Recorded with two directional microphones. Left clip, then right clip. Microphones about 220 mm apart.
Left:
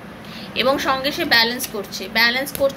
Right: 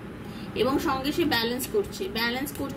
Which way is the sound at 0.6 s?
5° right (ahead or behind).